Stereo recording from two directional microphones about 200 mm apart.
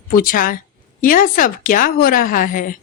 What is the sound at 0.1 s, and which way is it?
A woman's voice, 45° left (ahead or behind).